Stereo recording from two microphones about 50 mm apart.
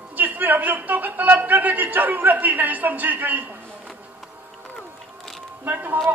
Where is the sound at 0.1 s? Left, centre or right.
Right.